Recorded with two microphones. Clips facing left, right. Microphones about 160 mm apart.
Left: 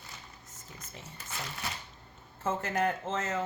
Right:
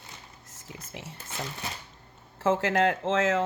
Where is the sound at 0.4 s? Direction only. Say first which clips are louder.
Right 4 dB; 90° right.